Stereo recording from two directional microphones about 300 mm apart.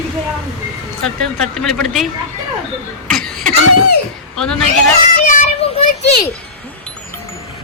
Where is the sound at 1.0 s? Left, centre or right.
Centre.